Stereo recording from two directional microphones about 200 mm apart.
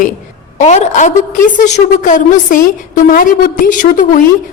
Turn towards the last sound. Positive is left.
turn(degrees=40)  # may be behind; listen again after turning